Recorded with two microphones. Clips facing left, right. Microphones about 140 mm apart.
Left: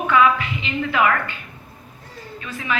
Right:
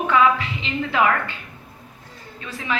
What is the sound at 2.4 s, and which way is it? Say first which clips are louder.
Speech: left 1 dB; 30° right (ahead or behind).